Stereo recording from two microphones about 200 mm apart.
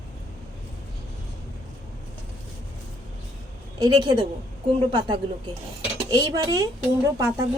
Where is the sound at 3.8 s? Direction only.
20° right (ahead or behind).